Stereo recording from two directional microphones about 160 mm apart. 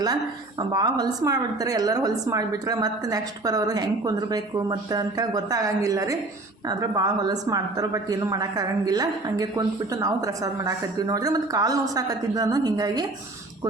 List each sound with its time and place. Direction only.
0.7 s a woman's voice: 25° right (ahead or behind)